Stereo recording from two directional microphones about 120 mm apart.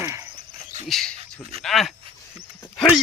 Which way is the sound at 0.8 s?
Centre (ahead or behind).